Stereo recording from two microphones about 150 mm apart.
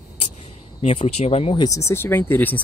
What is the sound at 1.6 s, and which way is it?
Speech, 20° left (ahead or behind).